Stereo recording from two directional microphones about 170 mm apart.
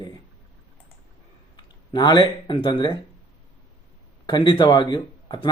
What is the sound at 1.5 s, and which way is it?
Speech, 25° left (ahead or behind).